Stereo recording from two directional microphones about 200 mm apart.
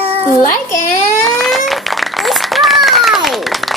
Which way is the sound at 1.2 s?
Centre (ahead or behind).